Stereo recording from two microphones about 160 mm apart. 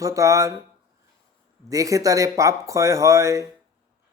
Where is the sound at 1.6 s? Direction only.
20° right (ahead or behind).